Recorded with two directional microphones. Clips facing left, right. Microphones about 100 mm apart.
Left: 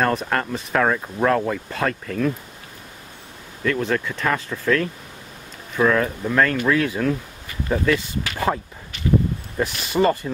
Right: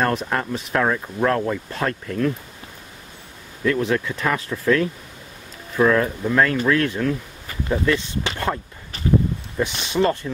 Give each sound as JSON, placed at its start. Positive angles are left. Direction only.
{"t": 0.0, "sound": "speech", "side_deg": 0}
{"t": 3.6, "sound": "speech", "side_deg": -5}
{"t": 8.9, "sound": "a sound", "side_deg": -35}
{"t": 9.6, "sound": "speech", "side_deg": 5}